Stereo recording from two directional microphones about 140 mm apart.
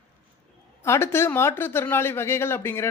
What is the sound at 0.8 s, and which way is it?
Speech, 20° left (ahead or behind).